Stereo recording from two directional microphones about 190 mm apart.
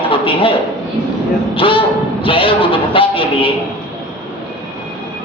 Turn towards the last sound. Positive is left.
turn(degrees=30)  # may be behind; listen again after turning